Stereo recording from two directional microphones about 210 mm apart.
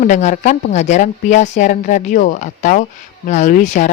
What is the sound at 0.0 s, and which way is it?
Speech, 35° left (ahead or behind).